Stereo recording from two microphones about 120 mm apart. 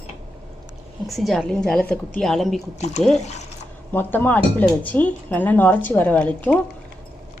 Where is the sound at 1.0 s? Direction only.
Centre (ahead or behind).